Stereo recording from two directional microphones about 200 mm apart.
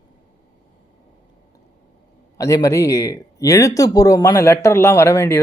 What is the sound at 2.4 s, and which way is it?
Speech, 15° left (ahead or behind).